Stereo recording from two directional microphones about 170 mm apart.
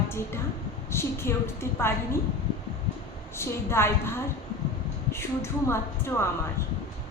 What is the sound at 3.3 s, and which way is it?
A woman's voice, 15° left (ahead or behind).